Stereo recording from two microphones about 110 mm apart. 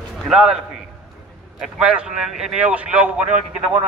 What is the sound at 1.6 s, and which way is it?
A man's voice, 10° right (ahead or behind).